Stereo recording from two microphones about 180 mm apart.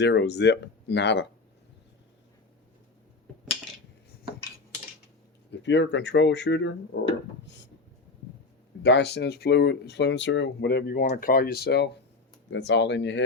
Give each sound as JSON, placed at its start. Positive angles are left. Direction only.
{"t": 0.0, "sound": "speech", "side_deg": 75}
{"t": 5.5, "sound": "speech", "side_deg": 80}
{"t": 8.8, "sound": "speech", "side_deg": 70}
{"t": 12.5, "sound": "speech", "side_deg": 75}